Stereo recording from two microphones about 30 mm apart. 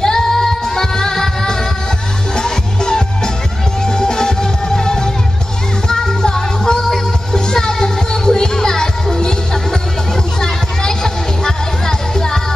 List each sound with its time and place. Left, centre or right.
0.0 s music: centre